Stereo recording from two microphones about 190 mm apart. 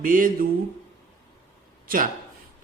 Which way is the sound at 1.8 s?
50° right (ahead or behind).